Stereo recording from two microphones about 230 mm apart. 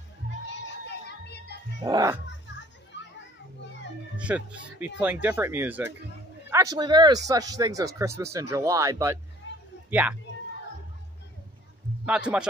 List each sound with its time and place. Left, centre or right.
1.0 s children playing: left
1.9 s speech: centre
2.9 s children playing: left
4.3 s a man's voice: centre
9.4 s a sound: left
9.8 s speech: centre
12.1 s a man's voice: centre